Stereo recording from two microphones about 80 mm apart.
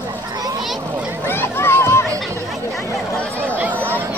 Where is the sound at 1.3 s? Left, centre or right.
Left.